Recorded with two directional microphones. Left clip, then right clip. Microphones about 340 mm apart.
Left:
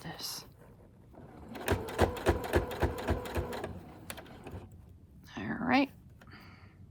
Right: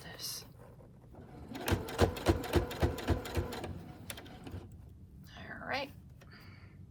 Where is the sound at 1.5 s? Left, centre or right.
Centre.